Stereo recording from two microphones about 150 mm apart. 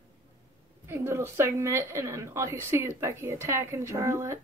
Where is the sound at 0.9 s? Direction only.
20° right (ahead or behind).